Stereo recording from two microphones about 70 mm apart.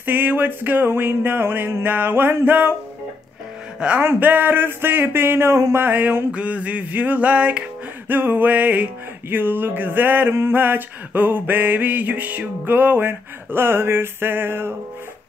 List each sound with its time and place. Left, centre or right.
0.0 s music: right
4.0 s a sound: right
5.8 s music: right